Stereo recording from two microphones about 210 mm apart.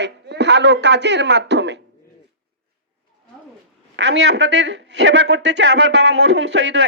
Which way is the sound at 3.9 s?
55° right (ahead or behind).